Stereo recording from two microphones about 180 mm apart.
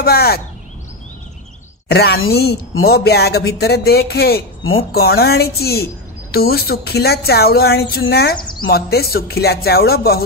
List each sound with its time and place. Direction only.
0.0 s speech: 60° left (ahead or behind)
1.9 s speech: 65° left (ahead or behind)
8.4 s speech: 25° left (ahead or behind)
8.6 s speech: 60° left (ahead or behind)